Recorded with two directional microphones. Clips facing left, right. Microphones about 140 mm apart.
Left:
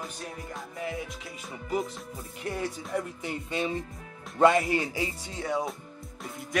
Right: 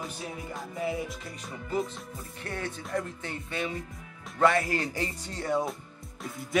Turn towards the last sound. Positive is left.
turn(degrees=0)  # may be behind; listen again after turning